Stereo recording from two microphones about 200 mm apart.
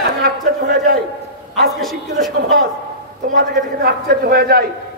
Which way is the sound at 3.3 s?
50° right (ahead or behind).